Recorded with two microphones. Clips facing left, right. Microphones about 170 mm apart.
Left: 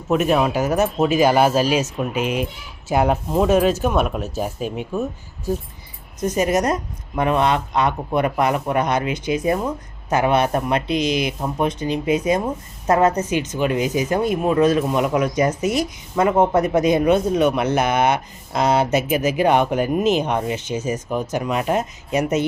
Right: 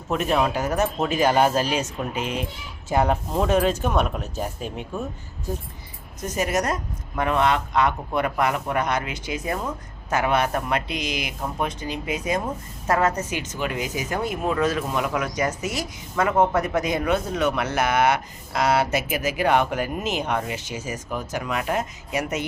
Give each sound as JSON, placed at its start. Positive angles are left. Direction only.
{"t": 0.1, "sound": "speech", "side_deg": 10}
{"t": 6.2, "sound": "speech", "side_deg": 20}